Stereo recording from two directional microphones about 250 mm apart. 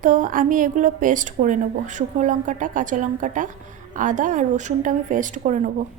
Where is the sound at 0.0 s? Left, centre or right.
Right.